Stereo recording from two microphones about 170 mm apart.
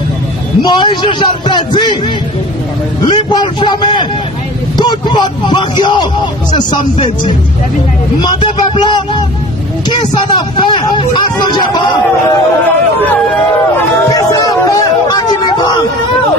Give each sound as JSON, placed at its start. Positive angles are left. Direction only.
{"t": 0.6, "sound": "speech", "side_deg": 25}
{"t": 3.1, "sound": "speech", "side_deg": 25}
{"t": 14.1, "sound": "a sound", "side_deg": 20}